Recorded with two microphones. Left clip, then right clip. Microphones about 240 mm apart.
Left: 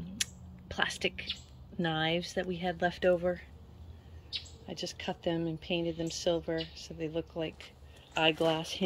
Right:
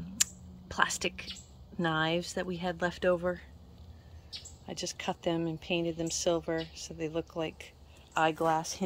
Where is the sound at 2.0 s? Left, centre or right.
Centre.